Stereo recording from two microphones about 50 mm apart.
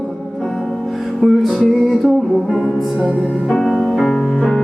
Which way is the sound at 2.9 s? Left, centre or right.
Right.